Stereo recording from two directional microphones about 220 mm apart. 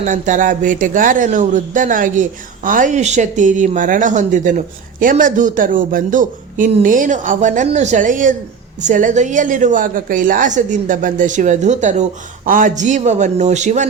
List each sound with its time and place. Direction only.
0.0 s speech: 35° right (ahead or behind)